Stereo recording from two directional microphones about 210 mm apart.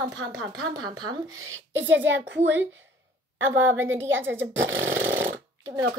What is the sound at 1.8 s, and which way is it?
A woman's voice, 60° right (ahead or behind).